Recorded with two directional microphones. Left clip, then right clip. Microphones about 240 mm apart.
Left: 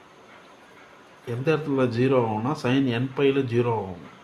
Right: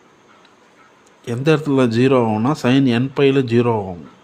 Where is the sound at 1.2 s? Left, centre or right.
Right.